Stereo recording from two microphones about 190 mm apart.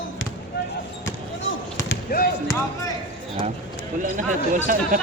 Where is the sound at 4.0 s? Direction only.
40° right (ahead or behind).